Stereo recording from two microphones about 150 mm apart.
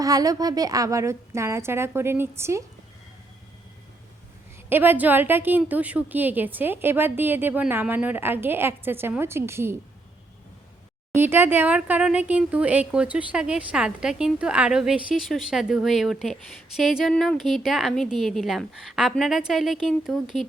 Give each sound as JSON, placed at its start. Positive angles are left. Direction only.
{"t": 0.0, "sound": "a woman's voice", "side_deg": -25}
{"t": 4.7, "sound": "a woman's voice", "side_deg": -15}
{"t": 11.1, "sound": "speech", "side_deg": -15}